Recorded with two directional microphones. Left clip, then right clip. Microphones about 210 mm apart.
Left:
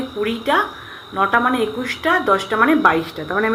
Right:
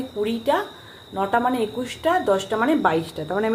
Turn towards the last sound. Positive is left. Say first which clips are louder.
# left 4 dB
turn(degrees=-10)  # may be behind; listen again after turning